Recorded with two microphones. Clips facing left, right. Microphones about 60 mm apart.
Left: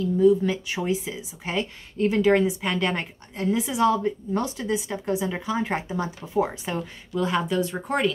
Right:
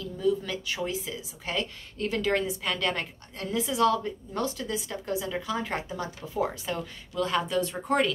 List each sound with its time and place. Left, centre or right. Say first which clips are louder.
0.0 s speech: left 9 dB; left; by 7.7 s centre